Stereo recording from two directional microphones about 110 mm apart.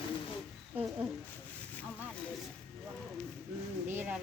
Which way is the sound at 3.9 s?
20° right (ahead or behind).